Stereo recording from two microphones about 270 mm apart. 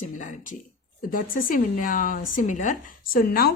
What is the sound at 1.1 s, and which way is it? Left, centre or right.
Speech, left.